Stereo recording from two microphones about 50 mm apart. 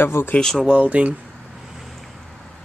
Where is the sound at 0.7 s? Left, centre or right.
Right.